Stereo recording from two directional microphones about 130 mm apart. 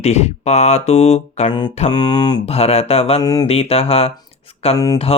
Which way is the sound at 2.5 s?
50° left (ahead or behind).